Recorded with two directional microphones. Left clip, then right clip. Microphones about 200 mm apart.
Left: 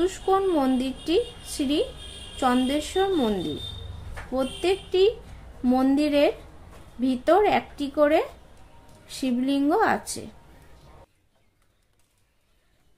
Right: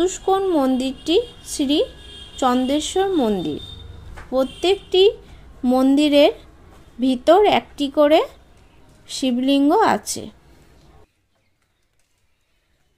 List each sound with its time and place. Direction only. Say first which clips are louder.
0.0 s a woman's voice: right 4 dB; 30° right (ahead or behind)